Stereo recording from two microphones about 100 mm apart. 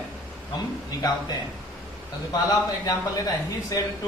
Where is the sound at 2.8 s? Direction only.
35° left (ahead or behind).